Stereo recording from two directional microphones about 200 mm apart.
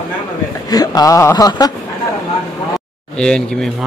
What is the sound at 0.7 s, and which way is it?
Speech, 20° left (ahead or behind).